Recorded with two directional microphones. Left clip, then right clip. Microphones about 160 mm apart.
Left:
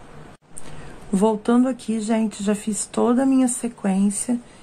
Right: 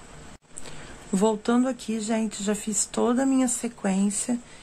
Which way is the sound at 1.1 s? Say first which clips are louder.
Left 4 dB; 10° right (ahead or behind).